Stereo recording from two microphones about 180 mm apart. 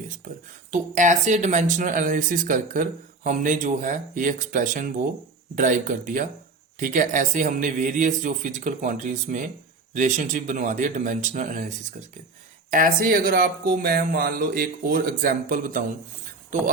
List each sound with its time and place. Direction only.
0.7 s speech: 45° right (ahead or behind)